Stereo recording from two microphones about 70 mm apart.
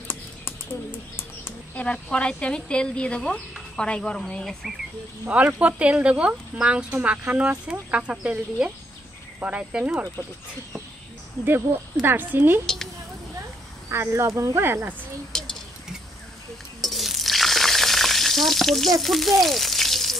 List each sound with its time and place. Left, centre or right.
1.8 s a woman's voice: centre
5.5 s speech: centre
11.4 s speech: right
13.8 s speech: right
15.3 s a sound: centre
16.8 s stir: centre
18.9 s speech: centre